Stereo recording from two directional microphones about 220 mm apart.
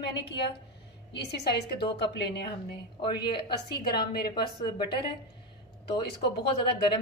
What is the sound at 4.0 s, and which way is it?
Speech, 45° left (ahead or behind).